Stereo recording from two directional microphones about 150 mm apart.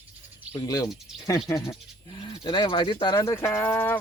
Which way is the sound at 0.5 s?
25° left (ahead or behind).